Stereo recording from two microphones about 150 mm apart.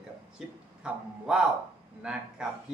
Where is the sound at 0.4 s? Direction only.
5° right (ahead or behind).